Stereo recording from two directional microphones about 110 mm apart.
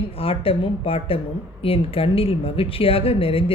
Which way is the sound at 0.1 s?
60° left (ahead or behind).